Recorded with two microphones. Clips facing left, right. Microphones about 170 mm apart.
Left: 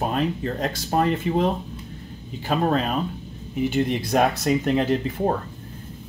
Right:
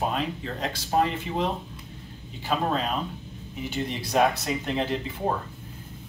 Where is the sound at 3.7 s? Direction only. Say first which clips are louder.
Left 6 dB; 50° left (ahead or behind).